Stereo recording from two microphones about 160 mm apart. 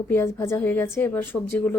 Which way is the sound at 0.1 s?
15° left (ahead or behind).